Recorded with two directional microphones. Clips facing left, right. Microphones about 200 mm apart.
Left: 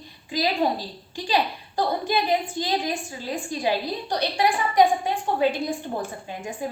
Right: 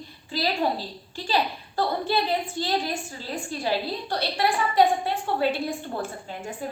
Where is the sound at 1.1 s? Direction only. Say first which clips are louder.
Left 2 dB; 15° left (ahead or behind).